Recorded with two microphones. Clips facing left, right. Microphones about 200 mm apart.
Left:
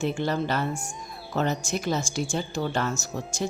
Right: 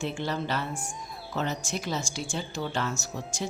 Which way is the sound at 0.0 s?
45° left (ahead or behind).